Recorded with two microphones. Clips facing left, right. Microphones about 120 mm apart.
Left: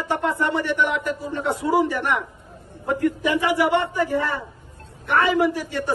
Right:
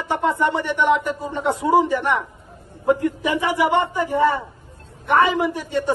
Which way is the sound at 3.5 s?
20° right (ahead or behind).